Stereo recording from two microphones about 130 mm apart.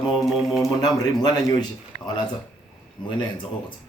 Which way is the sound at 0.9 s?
30° left (ahead or behind).